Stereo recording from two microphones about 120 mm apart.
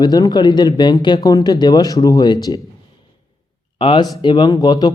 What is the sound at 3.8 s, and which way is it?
Speech, 40° left (ahead or behind).